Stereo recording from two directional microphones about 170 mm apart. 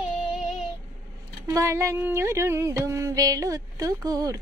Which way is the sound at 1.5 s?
15° right (ahead or behind).